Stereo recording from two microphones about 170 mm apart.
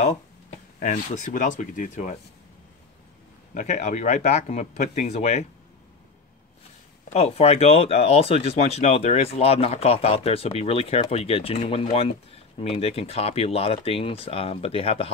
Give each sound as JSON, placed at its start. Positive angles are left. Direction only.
{"t": 0.7, "sound": "speech", "side_deg": 50}
{"t": 3.5, "sound": "speech", "side_deg": 45}
{"t": 7.1, "sound": "speech", "side_deg": 40}